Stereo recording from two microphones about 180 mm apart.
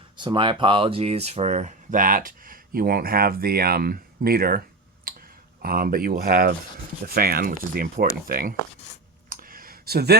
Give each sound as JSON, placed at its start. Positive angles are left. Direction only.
{"t": 0.2, "sound": "speech", "side_deg": -25}
{"t": 5.1, "sound": "clicking", "side_deg": -55}
{"t": 5.6, "sound": "speech", "side_deg": -55}
{"t": 9.3, "sound": "a sound", "side_deg": -50}